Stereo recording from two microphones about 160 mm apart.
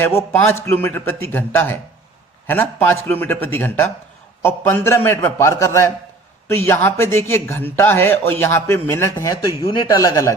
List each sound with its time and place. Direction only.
0.0 s speech: 15° left (ahead or behind)